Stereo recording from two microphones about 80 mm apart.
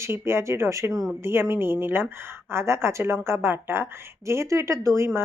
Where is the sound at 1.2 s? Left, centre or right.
Right.